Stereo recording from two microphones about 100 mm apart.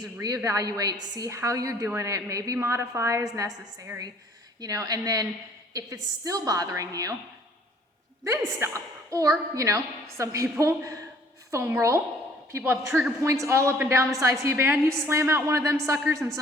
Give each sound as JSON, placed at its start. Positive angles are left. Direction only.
{"t": 0.2, "sound": "a woman's voice", "side_deg": -35}
{"t": 8.2, "sound": "a woman's voice", "side_deg": -30}